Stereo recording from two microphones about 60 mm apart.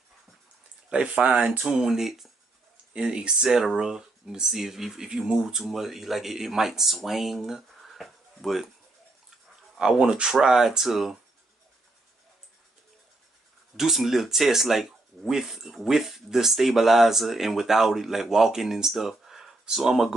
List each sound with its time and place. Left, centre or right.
0.8 s speech: centre
2.9 s speech: centre
9.8 s speech: centre
13.7 s speech: centre